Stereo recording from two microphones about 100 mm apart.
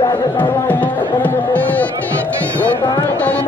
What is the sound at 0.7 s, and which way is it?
Speech, 15° left (ahead or behind).